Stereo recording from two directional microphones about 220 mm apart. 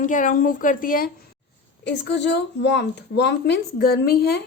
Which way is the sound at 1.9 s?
50° left (ahead or behind).